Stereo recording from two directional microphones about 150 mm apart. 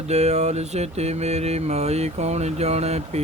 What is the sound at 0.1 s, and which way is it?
Mantra, 45° right (ahead or behind).